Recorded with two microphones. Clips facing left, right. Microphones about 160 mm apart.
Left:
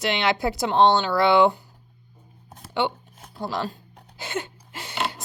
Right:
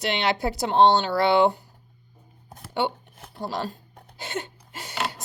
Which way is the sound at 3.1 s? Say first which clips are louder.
Right 1 dB; 60° right (ahead or behind).